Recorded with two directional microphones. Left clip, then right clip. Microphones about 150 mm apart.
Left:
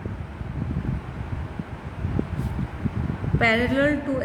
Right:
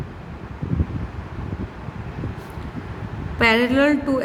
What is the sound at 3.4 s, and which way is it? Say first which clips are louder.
Speech: right 4 dB; 45° right (ahead or behind).